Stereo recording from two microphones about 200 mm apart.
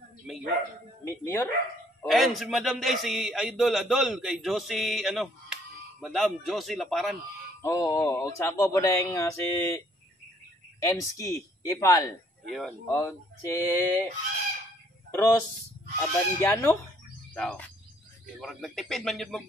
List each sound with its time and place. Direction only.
0.3 s a man's voice: centre (ahead or behind)
1.0 s speech: 10° left (ahead or behind)
2.0 s a man's voice: centre (ahead or behind)
7.6 s speech: 15° left (ahead or behind)
10.8 s speech: 15° left (ahead or behind)
12.4 s a man's voice: centre (ahead or behind)
12.8 s speech: 15° left (ahead or behind)
15.0 s a man's voice: 10° left (ahead or behind)